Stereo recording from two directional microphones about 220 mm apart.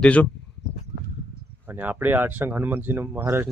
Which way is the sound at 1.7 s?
10° right (ahead or behind).